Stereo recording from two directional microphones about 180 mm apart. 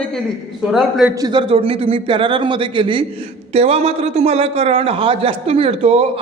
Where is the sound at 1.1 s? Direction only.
25° right (ahead or behind).